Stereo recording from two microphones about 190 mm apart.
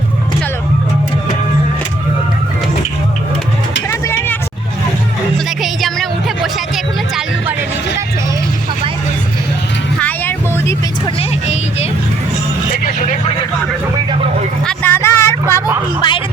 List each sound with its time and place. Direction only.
3.8 s vehicle: 10° left (ahead or behind)
5.6 s music: centre (ahead or behind)
10.0 s vehicle: 10° left (ahead or behind)
11.0 s vehicle: 30° left (ahead or behind)
12.7 s vehicle: 45° left (ahead or behind)
14.7 s music: 10° left (ahead or behind)
16.0 s music: 25° left (ahead or behind)